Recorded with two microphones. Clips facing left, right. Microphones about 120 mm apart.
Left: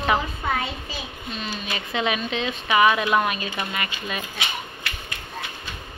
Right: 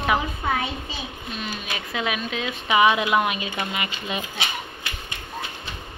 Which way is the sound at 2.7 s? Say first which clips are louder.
Even; 15° right (ahead or behind).